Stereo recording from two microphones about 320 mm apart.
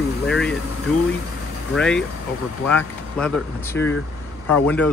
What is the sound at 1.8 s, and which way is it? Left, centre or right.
Speech, centre.